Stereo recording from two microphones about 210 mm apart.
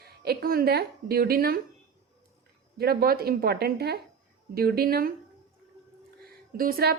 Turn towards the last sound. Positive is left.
turn(degrees=-45)  # may be behind; listen again after turning